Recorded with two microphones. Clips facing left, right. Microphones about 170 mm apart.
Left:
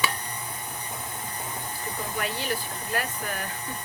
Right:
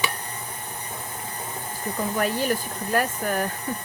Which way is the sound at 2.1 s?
45° right (ahead or behind).